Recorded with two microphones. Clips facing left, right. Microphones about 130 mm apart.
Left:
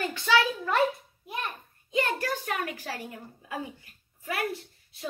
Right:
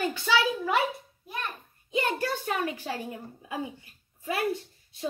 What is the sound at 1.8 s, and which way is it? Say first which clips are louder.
A woman's voice: even; 20° right (ahead or behind).